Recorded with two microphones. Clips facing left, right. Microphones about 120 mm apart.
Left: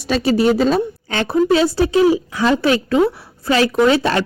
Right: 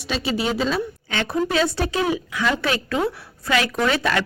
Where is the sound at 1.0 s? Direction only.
40° left (ahead or behind).